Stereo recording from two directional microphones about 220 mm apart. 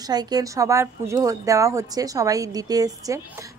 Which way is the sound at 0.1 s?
20° right (ahead or behind).